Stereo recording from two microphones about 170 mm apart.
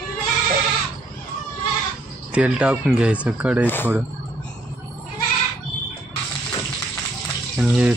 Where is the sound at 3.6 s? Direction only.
10° left (ahead or behind).